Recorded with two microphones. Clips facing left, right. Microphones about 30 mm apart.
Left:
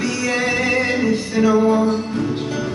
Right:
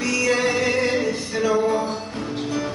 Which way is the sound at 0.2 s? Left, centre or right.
Centre.